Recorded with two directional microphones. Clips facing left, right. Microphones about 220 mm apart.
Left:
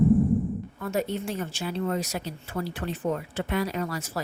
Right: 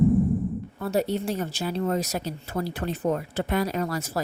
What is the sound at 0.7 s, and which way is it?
Speech, 35° right (ahead or behind).